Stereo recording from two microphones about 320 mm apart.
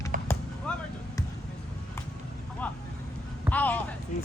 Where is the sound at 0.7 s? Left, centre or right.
Centre.